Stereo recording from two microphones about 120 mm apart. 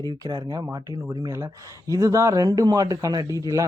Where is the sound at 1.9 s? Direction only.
25° right (ahead or behind).